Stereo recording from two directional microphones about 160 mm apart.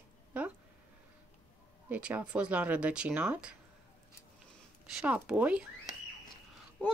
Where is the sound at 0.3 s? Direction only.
10° right (ahead or behind).